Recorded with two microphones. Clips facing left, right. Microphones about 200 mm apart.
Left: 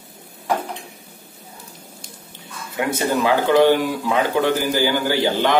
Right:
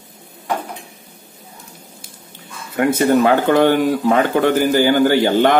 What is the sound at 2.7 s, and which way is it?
Speech, 55° right (ahead or behind).